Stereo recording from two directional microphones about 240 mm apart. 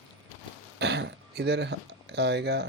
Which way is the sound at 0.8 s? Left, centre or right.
Right.